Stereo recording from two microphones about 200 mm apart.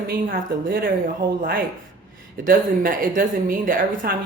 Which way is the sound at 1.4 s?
45° right (ahead or behind).